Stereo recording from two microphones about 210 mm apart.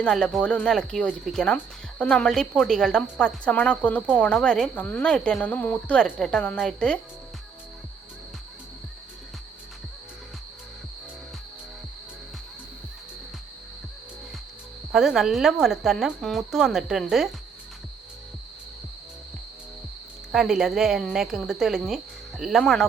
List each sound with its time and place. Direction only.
0.0 s speech: centre (ahead or behind)
14.9 s speech: centre (ahead or behind)
20.3 s speech: centre (ahead or behind)